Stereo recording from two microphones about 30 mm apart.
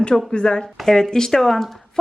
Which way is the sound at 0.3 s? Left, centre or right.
Left.